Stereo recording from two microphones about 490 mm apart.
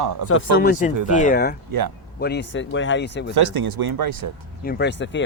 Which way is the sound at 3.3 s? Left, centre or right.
Right.